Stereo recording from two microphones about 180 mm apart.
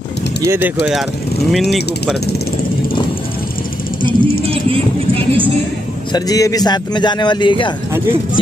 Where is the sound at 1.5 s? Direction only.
Centre (ahead or behind).